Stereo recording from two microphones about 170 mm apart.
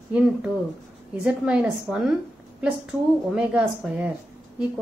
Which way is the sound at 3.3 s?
5° right (ahead or behind).